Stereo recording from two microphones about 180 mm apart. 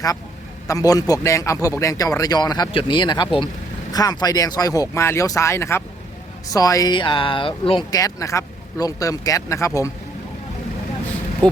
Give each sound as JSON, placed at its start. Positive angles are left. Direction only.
{"t": 0.7, "sound": "speech", "side_deg": 20}